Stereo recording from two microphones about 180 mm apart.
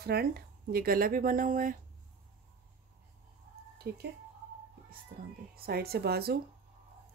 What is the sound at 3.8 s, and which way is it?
Speech, 60° right (ahead or behind).